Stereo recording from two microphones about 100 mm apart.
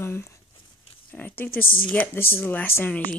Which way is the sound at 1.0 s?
15° left (ahead or behind).